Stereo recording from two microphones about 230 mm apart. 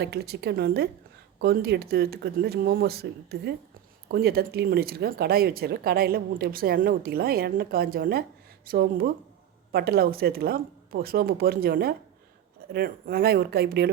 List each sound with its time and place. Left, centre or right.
0.0 s speech: right